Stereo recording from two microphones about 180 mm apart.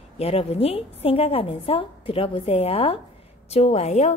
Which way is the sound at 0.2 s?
35° left (ahead or behind).